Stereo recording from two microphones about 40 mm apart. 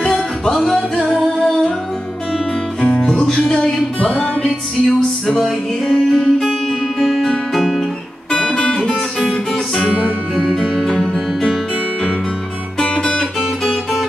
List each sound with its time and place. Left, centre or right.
0.6 s music: centre
2.3 s music: centre
4.8 s music: centre
8.3 s guitar: left
9.2 s music: centre
12.8 s music: left